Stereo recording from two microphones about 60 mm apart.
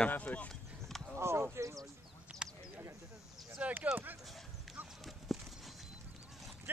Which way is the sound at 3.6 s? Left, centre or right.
Right.